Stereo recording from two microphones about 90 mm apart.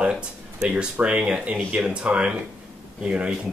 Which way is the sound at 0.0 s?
10° right (ahead or behind).